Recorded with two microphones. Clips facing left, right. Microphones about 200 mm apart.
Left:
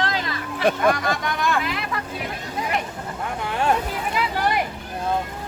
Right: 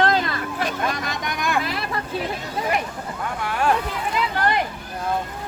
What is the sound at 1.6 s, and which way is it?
Speech, 35° right (ahead or behind).